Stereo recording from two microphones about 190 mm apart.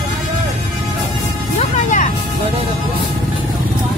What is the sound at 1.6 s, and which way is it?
Music, 40° left (ahead or behind).